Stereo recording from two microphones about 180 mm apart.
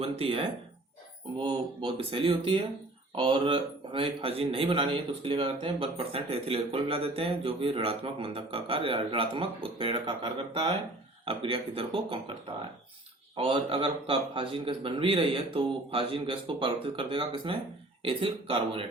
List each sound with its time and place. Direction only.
0.0 s a man's voice: 30° right (ahead or behind)